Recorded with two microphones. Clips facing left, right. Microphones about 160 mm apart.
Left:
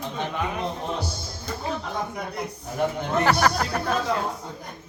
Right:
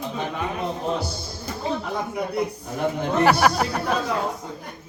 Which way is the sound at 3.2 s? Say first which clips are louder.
Right 4 dB; 15° right (ahead or behind).